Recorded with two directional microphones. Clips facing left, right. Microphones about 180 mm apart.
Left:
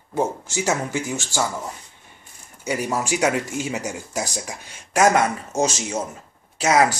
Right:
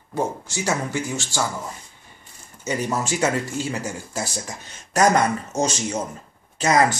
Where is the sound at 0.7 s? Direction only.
15° left (ahead or behind).